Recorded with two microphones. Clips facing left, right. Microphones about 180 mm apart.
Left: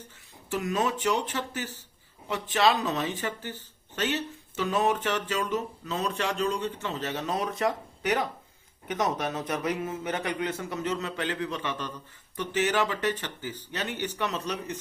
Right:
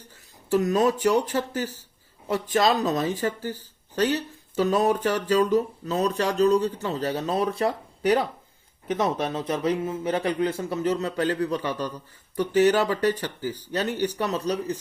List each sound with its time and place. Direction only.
0.5 s speech: 40° right (ahead or behind)